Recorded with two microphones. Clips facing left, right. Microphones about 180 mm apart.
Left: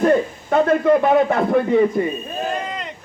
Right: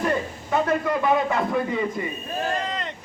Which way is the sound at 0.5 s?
55° left (ahead or behind).